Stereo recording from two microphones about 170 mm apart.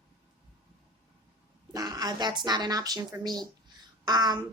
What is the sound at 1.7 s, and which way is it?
A woman's voice, 20° right (ahead or behind).